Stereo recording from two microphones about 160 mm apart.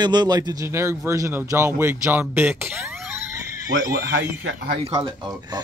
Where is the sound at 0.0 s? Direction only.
25° right (ahead or behind).